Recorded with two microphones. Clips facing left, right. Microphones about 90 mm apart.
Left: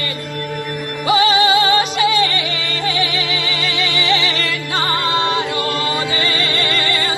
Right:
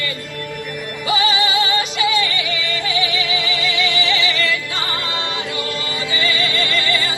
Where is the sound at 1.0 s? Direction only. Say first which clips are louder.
Left 5 dB; 50° left (ahead or behind).